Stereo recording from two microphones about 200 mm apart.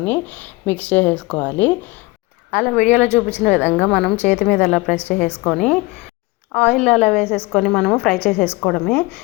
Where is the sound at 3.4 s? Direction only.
10° right (ahead or behind).